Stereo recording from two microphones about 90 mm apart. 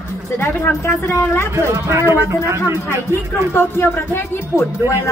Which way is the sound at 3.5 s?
25° left (ahead or behind).